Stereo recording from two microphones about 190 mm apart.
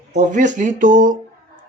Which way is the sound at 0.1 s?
40° right (ahead or behind).